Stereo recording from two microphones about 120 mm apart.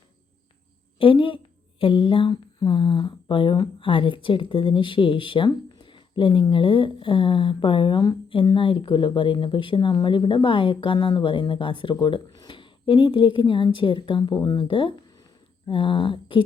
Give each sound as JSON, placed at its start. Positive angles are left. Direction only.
{"t": 0.9, "sound": "a woman's voice", "side_deg": 45}